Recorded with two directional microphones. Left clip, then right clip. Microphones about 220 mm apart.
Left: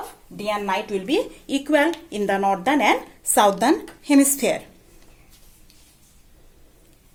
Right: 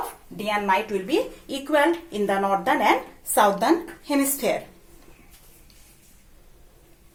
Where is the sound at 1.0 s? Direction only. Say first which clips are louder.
Left 1 dB; 45° left (ahead or behind).